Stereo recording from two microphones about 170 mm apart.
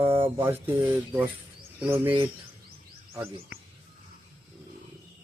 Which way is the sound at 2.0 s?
30° right (ahead or behind).